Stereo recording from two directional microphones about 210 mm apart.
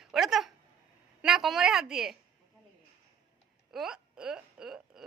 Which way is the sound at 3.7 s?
Centre (ahead or behind).